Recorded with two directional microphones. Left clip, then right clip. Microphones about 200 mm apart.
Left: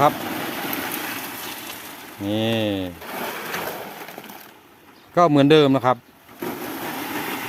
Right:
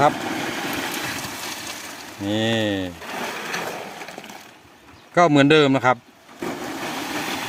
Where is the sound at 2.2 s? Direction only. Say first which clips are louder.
Right 1 dB; centre (ahead or behind).